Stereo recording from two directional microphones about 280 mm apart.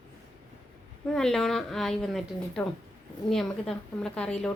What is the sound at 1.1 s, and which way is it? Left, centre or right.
A woman's voice, centre.